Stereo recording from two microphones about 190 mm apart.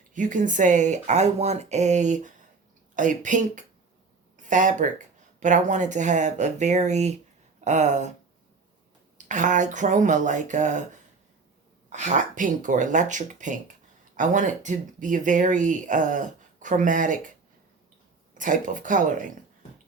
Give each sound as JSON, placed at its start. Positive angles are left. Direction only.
{"t": 0.1, "sound": "speech", "side_deg": -40}
{"t": 9.1, "sound": "speech", "side_deg": -40}
{"t": 11.9, "sound": "speech", "side_deg": -40}
{"t": 18.3, "sound": "speech", "side_deg": -45}